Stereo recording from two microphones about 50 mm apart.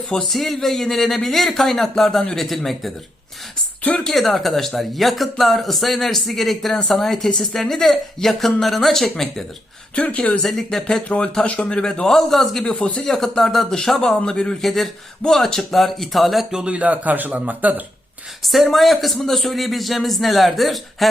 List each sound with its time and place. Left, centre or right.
0.1 s speech: centre
3.9 s speech: centre
9.9 s speech: left
10.4 s speech: centre
11.1 s speech: left
12.0 s speech: centre
12.6 s speech: centre
13.1 s speech: centre
14.6 s speech: centre
16.5 s speech: centre
16.7 s speech: right
18.4 s speech: centre